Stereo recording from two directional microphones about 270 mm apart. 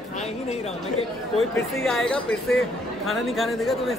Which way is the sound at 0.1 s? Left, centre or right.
Left.